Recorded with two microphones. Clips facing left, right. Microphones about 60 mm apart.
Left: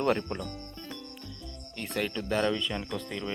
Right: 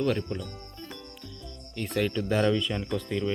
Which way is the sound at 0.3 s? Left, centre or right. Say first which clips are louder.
Right 1 dB; left.